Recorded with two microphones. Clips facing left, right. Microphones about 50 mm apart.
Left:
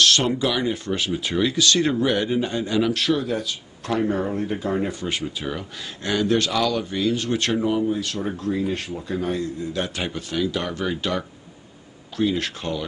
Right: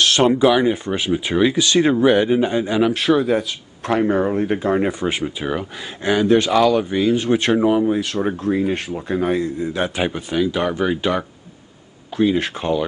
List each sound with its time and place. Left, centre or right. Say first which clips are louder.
0.0 s a sound: right 4 dB; right
0.4 s speech: right 8 dB; right
5.1 s speech: right 5 dB; right
9.7 s speech: right 6 dB; right